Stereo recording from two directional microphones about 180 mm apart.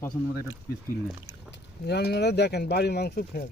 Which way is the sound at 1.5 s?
65° left (ahead or behind).